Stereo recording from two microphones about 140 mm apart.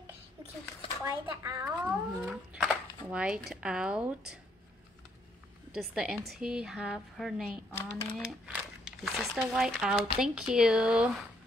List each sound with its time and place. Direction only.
1.4 s a child's voice: 25° right (ahead or behind)
1.8 s a sound: 10° right (ahead or behind)
2.6 s speech: 5° right (ahead or behind)
5.7 s speech: 5° right (ahead or behind)
7.7 s speech: 15° left (ahead or behind)
8.3 s speech: centre (ahead or behind)